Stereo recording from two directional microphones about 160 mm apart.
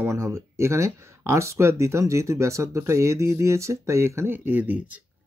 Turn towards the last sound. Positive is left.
turn(degrees=-10)  # may be behind; listen again after turning